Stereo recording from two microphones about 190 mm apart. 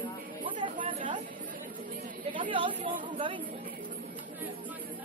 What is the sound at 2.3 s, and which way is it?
Speech, 25° right (ahead or behind).